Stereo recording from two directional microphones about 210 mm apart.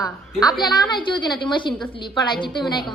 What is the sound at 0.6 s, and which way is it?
A woman's voice, 20° left (ahead or behind).